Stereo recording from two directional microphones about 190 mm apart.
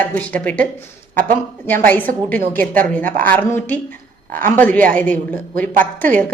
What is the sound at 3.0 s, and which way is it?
Speech, 45° right (ahead or behind).